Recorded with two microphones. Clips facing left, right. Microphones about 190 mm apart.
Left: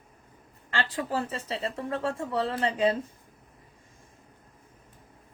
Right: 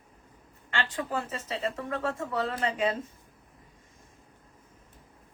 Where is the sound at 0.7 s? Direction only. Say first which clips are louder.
Left 2 dB; 35° left (ahead or behind).